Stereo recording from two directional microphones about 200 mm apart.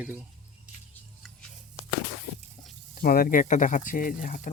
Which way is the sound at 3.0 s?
50° left (ahead or behind).